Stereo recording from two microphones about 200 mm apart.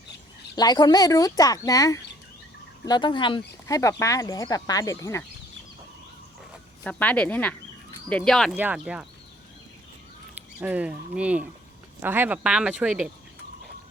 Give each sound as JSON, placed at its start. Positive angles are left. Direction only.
{"t": 0.5, "sound": "speech", "side_deg": 20}
{"t": 6.8, "sound": "speech", "side_deg": 5}
{"t": 10.6, "sound": "speech", "side_deg": -5}